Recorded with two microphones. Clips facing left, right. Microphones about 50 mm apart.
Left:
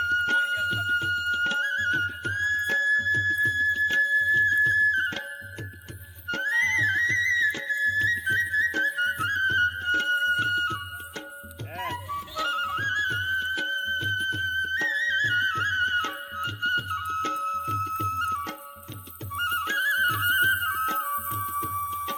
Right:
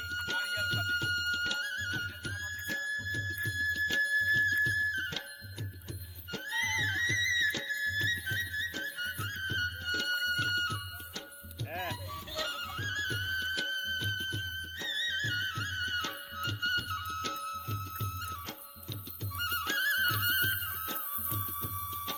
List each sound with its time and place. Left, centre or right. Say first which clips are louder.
0.0 s music: left 12 dB; left
0.3 s music: left 8 dB; left
6.2 s music: left 10 dB; left
12.7 s music: left 9 dB; left
19.3 s music: left 7 dB; left